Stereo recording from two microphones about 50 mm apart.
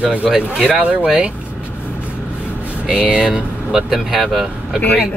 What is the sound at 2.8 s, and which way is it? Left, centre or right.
Speech, centre.